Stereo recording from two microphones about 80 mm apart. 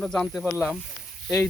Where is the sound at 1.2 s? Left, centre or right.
Centre.